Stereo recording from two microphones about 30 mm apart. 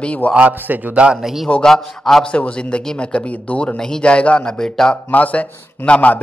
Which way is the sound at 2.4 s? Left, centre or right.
Left.